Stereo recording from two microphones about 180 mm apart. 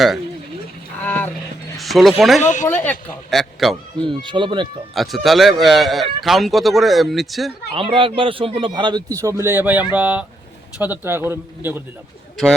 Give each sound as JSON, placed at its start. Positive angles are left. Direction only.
{"t": 1.0, "sound": "a sound", "side_deg": 10}
{"t": 1.8, "sound": "speech", "side_deg": 0}
{"t": 2.4, "sound": "speech", "side_deg": 45}
{"t": 2.6, "sound": "speech", "side_deg": 10}
{"t": 4.0, "sound": "speech", "side_deg": -25}
{"t": 4.9, "sound": "speech", "side_deg": 0}
{"t": 7.7, "sound": "a man's voice", "side_deg": -30}